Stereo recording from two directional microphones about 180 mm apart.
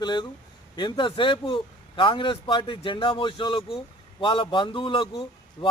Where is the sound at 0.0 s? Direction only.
25° left (ahead or behind).